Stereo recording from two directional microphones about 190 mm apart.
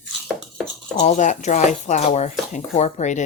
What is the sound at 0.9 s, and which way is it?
Speech, 35° left (ahead or behind).